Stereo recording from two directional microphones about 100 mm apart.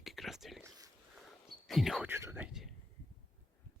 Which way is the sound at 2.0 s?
20° right (ahead or behind).